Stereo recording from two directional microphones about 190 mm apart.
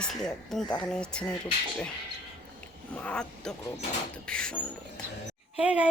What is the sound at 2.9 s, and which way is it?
Speech, 5° left (ahead or behind).